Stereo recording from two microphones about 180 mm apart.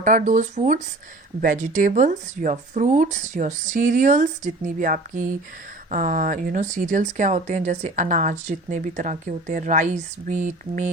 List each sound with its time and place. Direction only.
0.0 s speech: 45° right (ahead or behind)